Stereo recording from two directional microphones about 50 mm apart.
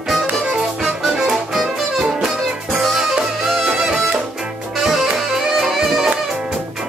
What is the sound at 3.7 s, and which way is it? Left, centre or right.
Music, centre.